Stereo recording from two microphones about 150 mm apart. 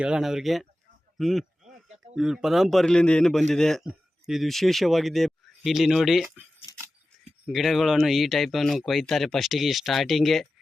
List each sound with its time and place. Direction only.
0.0 s speech: 5° right (ahead or behind)
1.6 s a sound: 50° right (ahead or behind)
2.1 s speech: 5° right (ahead or behind)
7.4 s speech: centre (ahead or behind)